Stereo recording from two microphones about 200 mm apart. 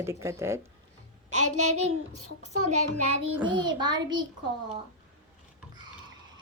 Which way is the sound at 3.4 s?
20° right (ahead or behind).